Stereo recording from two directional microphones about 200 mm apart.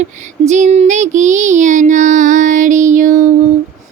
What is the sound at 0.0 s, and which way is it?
Child singing, 35° right (ahead or behind).